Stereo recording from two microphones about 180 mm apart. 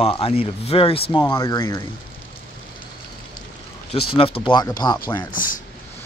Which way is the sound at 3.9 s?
30° left (ahead or behind).